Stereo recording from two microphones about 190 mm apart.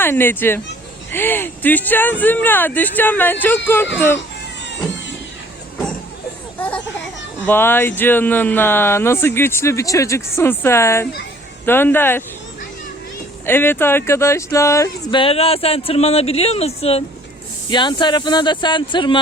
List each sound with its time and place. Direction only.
0.0 s speech: 10° left (ahead or behind)
6.6 s children playing: 5° left (ahead or behind)
7.4 s speech: 10° left (ahead or behind)
13.4 s speech: 10° left (ahead or behind)